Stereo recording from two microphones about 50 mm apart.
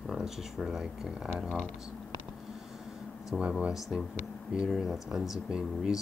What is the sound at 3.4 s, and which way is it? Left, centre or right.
Speech, right.